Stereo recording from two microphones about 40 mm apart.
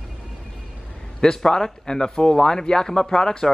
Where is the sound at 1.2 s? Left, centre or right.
Centre.